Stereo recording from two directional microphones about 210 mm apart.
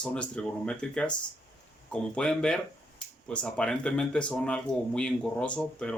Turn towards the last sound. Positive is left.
turn(degrees=5)  # may be behind; listen again after turning